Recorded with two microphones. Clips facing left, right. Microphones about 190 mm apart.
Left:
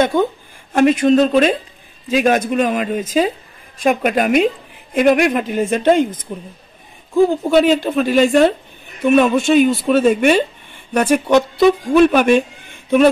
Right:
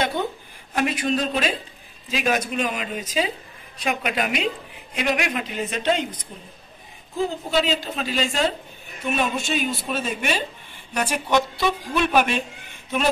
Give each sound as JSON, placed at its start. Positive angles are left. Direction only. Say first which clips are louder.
{"t": 0.7, "sound": "speech", "louder": "left 11 dB", "side_deg": 45}
{"t": 7.5, "sound": "speech", "louder": "left 9 dB", "side_deg": 55}